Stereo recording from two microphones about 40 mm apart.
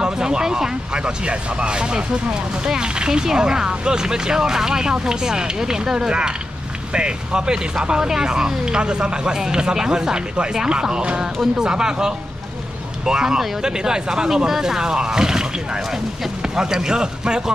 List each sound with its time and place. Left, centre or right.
0.0 s speech: centre
16.5 s speech: centre